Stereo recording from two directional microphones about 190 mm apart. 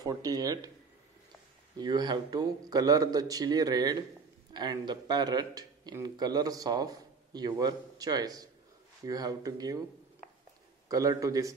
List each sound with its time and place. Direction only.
0.0 s a man's voice: 20° right (ahead or behind)
1.8 s a man's voice: 20° right (ahead or behind)
10.9 s a man's voice: 20° right (ahead or behind)